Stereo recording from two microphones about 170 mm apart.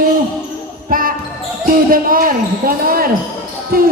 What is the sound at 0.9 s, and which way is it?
Basketball bounce, 55° right (ahead or behind).